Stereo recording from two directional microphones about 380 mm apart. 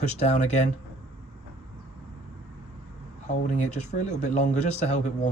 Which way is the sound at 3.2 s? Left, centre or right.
Centre.